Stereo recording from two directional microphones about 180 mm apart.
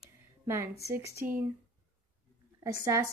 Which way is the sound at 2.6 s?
20° right (ahead or behind).